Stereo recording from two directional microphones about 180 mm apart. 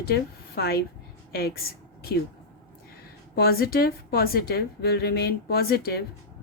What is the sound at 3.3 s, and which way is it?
A woman's voice, 55° left (ahead or behind).